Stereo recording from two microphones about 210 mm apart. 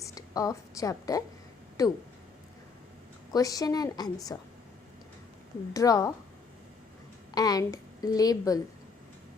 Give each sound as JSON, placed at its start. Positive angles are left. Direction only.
{"t": 0.0, "sound": "a woman's voice", "side_deg": 15}
{"t": 3.3, "sound": "a woman's voice", "side_deg": 15}
{"t": 5.7, "sound": "a woman's voice", "side_deg": 15}
{"t": 7.3, "sound": "a woman's voice", "side_deg": 15}